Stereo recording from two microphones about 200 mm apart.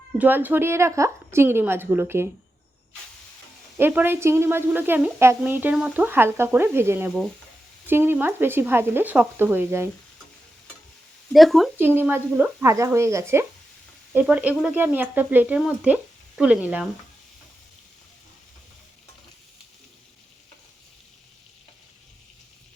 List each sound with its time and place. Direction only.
0.2 s speech: 10° right (ahead or behind)
3.8 s speech: 10° right (ahead or behind)
11.3 s speech: centre (ahead or behind)